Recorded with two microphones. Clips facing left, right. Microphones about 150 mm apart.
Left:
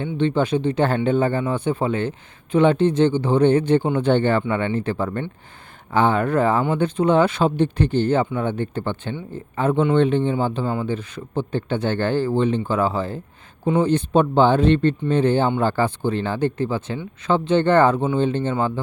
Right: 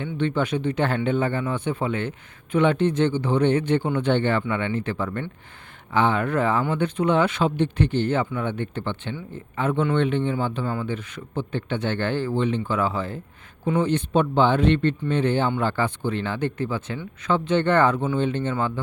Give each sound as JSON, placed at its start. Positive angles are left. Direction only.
{"t": 0.0, "sound": "speech", "side_deg": 30}